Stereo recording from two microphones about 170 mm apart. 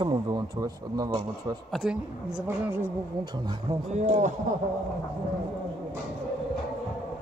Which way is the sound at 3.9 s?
40° right (ahead or behind).